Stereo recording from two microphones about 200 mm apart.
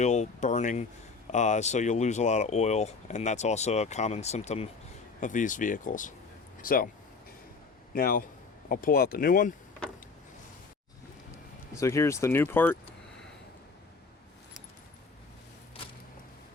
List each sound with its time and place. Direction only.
0.0 s speech: 35° left (ahead or behind)
7.9 s speech: 45° left (ahead or behind)
11.7 s speech: 15° left (ahead or behind)